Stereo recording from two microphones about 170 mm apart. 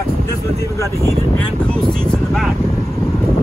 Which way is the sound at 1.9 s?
5° left (ahead or behind).